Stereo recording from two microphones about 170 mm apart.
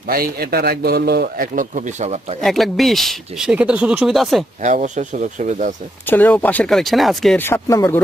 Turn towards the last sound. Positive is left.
turn(degrees=20)  # may be behind; listen again after turning